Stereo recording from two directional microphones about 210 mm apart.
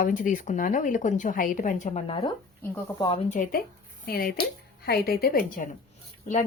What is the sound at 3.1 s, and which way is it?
Speech, 35° left (ahead or behind).